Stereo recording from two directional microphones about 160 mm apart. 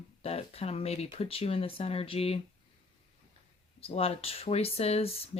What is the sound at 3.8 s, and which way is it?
Speech, 40° left (ahead or behind).